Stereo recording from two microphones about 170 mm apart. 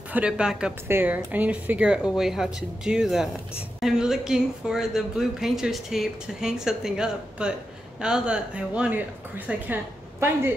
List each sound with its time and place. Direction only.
0.1 s speech: 5° right (ahead or behind)